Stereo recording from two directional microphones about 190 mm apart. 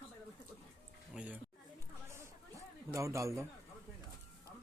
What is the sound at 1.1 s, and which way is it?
Speech, 5° right (ahead or behind).